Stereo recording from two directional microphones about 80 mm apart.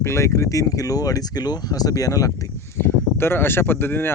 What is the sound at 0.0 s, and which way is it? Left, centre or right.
Speech, left.